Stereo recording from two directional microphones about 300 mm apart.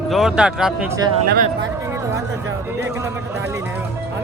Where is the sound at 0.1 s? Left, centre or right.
Centre.